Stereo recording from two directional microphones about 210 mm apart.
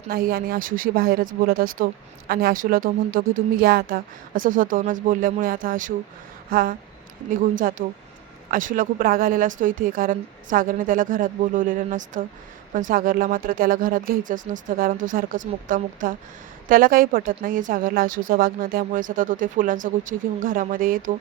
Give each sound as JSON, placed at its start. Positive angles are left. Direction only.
{"t": 0.1, "sound": "speech", "side_deg": -45}